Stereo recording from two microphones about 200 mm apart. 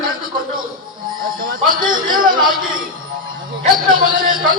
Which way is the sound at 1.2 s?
45° right (ahead or behind).